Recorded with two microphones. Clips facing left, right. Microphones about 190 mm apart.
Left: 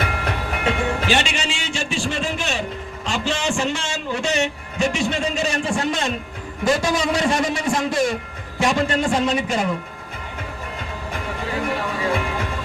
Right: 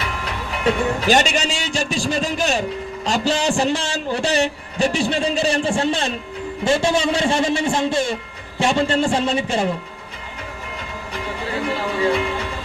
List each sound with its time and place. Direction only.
0.0 s train: 55° left (ahead or behind)
0.6 s music: 40° right (ahead or behind)
6.7 s a man's voice: 30° right (ahead or behind)